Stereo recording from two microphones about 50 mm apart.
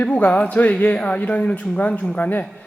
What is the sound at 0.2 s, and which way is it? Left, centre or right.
Speech, left.